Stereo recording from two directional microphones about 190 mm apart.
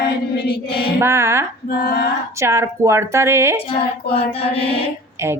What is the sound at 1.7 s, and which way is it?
Child singing, 55° left (ahead or behind).